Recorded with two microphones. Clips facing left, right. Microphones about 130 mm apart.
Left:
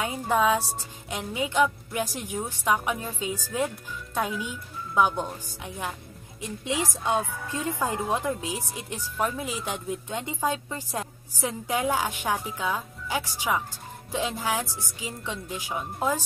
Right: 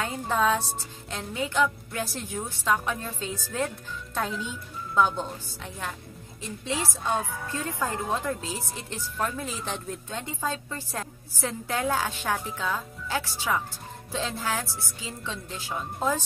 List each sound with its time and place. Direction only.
0.0 s speech: 10° left (ahead or behind)